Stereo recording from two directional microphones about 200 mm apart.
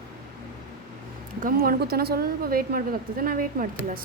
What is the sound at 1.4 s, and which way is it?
A woman's voice, 45° right (ahead or behind).